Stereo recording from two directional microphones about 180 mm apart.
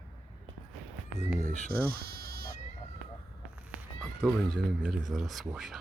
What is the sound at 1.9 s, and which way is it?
Bleat, 60° right (ahead or behind).